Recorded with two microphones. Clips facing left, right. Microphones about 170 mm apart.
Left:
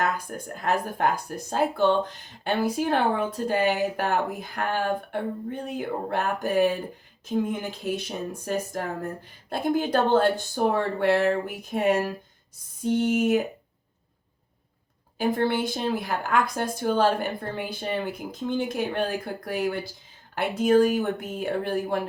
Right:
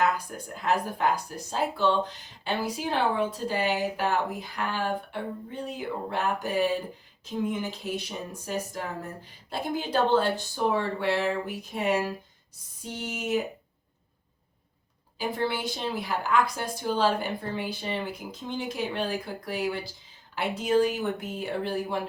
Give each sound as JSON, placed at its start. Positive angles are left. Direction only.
{"t": 0.4, "sound": "speech", "side_deg": 50}
{"t": 8.7, "sound": "speech", "side_deg": 50}
{"t": 15.2, "sound": "speech", "side_deg": 50}